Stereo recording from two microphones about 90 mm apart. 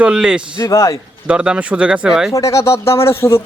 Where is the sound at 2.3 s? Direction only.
35° left (ahead or behind).